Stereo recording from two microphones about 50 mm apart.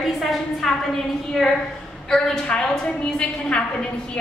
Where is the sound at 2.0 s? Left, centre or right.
Centre.